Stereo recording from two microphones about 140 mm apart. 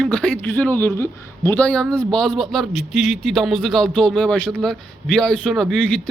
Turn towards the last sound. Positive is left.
turn(degrees=0)  # may be behind; listen again after turning